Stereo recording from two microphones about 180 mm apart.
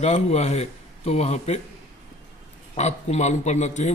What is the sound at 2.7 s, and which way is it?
Speech, 40° left (ahead or behind).